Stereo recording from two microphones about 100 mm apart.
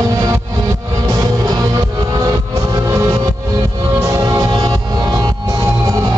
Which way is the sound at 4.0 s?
30° right (ahead or behind).